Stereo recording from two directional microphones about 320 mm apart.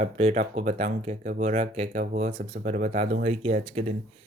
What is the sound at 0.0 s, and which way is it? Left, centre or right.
Speech, centre.